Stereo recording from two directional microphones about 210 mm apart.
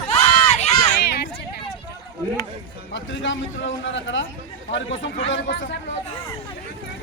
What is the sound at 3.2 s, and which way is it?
A man's voice, 60° left (ahead or behind).